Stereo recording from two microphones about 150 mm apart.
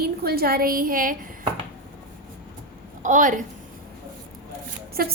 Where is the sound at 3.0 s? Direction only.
60° right (ahead or behind).